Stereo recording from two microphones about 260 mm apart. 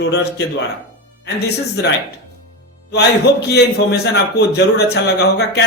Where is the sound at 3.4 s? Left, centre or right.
Left.